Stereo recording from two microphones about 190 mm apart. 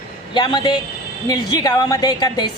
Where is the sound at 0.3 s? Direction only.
25° left (ahead or behind).